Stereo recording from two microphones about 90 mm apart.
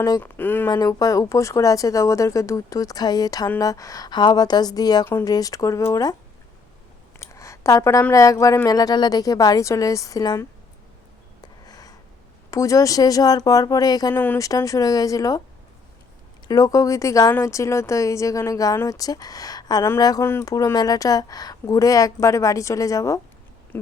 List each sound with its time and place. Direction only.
0.2 s speech: 20° left (ahead or behind)
0.7 s a woman's voice: 45° left (ahead or behind)
7.2 s a sound: 35° left (ahead or behind)
8.1 s a woman's voice: 40° left (ahead or behind)
11.6 s a sound: 45° left (ahead or behind)
12.5 s speech: 40° left (ahead or behind)
14.1 s speech: 20° left (ahead or behind)
14.3 s speech: 40° left (ahead or behind)
16.5 s a woman's voice: 40° left (ahead or behind)